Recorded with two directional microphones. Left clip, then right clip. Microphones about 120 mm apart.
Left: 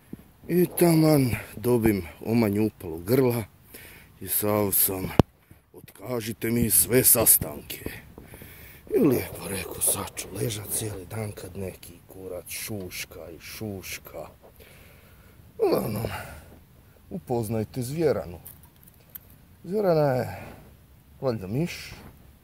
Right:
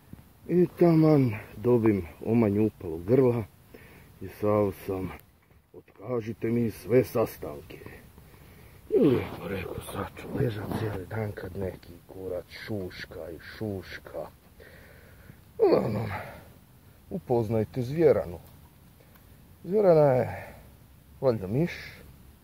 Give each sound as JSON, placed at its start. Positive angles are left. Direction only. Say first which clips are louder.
{"t": 0.5, "sound": "speech", "louder": "left 1 dB", "side_deg": 15}
{"t": 6.2, "sound": "speech", "louder": "left 2 dB", "side_deg": 20}
{"t": 15.6, "sound": "speech", "louder": "right 1 dB", "side_deg": 10}
{"t": 19.7, "sound": "speech", "louder": "right 2 dB", "side_deg": 5}